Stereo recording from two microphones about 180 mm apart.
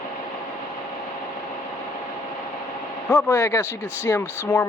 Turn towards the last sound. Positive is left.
turn(degrees=15)  # may be behind; listen again after turning